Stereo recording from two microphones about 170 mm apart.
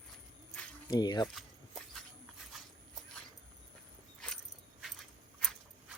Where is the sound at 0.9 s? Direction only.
25° left (ahead or behind).